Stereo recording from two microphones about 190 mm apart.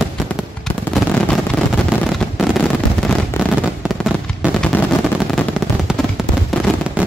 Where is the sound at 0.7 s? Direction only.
Centre (ahead or behind).